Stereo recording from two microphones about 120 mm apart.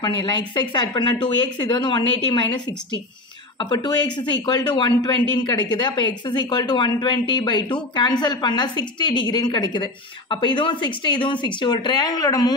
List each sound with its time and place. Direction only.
0.0 s speech: 40° left (ahead or behind)